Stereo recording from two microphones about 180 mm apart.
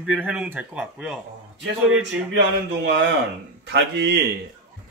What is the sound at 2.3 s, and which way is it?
Speech, 75° right (ahead or behind).